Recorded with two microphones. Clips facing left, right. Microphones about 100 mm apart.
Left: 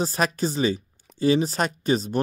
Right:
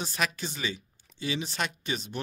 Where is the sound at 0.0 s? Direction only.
40° left (ahead or behind).